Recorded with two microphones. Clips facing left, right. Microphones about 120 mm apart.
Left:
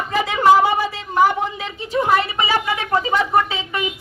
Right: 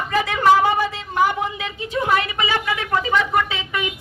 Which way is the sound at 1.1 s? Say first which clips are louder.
Left 3 dB; 35° left (ahead or behind).